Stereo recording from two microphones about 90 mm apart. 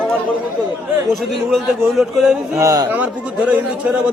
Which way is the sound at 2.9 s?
15° right (ahead or behind).